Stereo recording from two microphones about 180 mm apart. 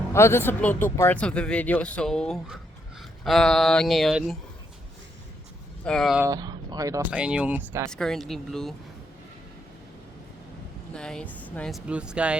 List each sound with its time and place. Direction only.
0.1 s speech: 15° left (ahead or behind)
5.8 s speech: 5° left (ahead or behind)
6.2 s speech: 20° right (ahead or behind)
7.1 s speech: 5° right (ahead or behind)
7.9 s speech: 5° left (ahead or behind)
10.9 s speech: 5° left (ahead or behind)
11.9 s speech: 5° right (ahead or behind)